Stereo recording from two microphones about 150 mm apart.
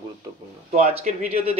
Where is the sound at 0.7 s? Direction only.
45° right (ahead or behind).